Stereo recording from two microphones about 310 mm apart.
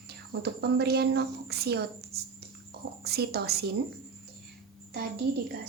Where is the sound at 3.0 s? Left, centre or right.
Right.